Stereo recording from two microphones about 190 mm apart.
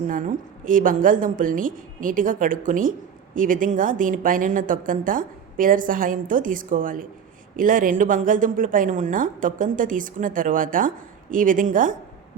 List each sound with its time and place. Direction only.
0.1 s a woman's voice: 45° right (ahead or behind)